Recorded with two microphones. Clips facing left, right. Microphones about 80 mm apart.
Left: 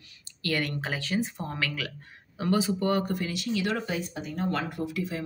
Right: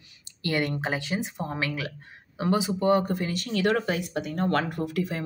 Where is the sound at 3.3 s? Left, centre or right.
Right.